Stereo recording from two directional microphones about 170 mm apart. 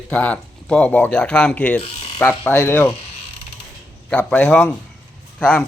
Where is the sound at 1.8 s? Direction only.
35° left (ahead or behind).